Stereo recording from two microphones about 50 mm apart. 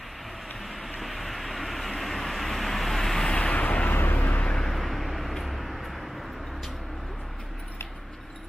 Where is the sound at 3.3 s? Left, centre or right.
Left.